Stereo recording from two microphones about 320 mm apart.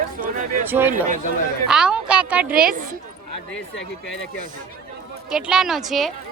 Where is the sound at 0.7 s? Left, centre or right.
Centre.